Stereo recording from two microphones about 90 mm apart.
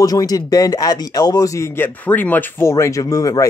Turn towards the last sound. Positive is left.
turn(degrees=40)  # may be behind; listen again after turning